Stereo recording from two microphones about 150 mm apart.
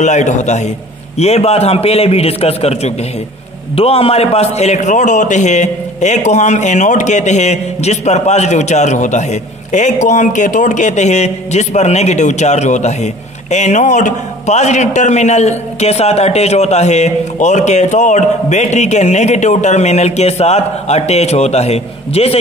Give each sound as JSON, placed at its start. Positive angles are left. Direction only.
{"t": 0.0, "sound": "a man's voice", "side_deg": 50}